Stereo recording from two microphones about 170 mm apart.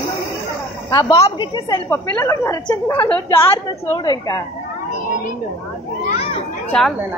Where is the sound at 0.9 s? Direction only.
20° left (ahead or behind).